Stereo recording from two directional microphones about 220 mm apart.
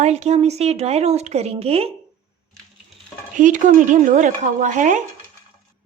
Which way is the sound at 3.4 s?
35° right (ahead or behind).